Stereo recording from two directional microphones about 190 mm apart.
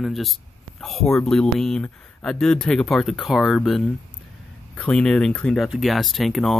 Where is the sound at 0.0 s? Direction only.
Centre (ahead or behind).